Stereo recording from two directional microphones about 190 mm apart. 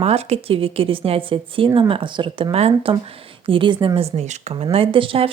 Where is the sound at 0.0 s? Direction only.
30° right (ahead or behind).